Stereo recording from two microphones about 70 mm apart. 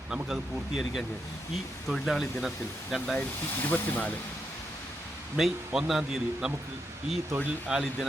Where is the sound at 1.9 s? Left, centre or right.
Centre.